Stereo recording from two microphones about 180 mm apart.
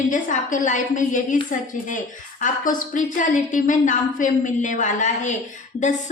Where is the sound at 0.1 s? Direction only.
45° left (ahead or behind).